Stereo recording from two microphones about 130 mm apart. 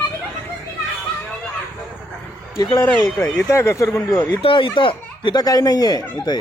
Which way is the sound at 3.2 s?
20° left (ahead or behind).